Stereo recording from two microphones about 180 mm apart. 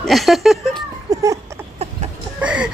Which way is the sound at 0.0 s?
Centre (ahead or behind).